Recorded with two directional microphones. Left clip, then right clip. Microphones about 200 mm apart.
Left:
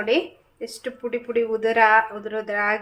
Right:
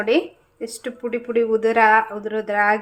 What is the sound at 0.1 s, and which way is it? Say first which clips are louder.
A woman's voice: right 2 dB; 20° right (ahead or behind).